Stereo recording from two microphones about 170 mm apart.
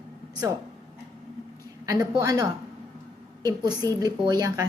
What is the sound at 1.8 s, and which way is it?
Speech, 20° right (ahead or behind).